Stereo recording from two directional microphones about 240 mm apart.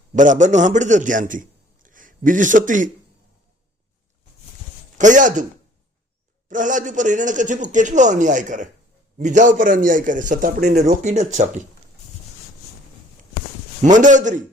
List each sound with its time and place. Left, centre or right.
0.1 s a man's voice: right
4.9 s a man's voice: right
6.5 s a man's voice: right
13.8 s a man's voice: right